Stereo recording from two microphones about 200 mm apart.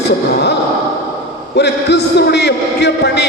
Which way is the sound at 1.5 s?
55° left (ahead or behind).